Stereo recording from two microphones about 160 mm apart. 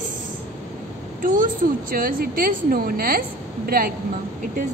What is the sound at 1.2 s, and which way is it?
A woman's voice, 55° right (ahead or behind).